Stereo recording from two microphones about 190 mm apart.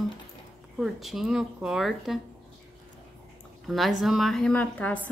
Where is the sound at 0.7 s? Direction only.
Centre (ahead or behind).